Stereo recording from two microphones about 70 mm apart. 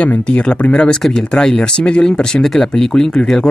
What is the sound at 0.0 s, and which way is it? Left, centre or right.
Speech, centre.